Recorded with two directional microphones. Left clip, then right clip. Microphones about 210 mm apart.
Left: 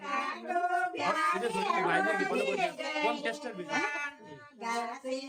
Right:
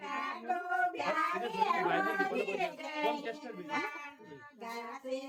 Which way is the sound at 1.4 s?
40° left (ahead or behind).